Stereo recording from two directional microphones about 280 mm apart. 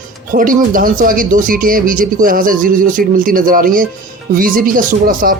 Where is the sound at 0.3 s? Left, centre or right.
Right.